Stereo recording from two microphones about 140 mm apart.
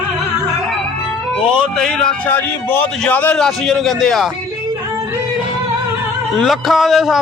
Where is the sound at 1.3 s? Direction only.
5° left (ahead or behind).